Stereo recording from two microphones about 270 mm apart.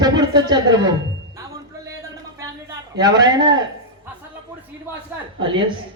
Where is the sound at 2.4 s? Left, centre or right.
Centre.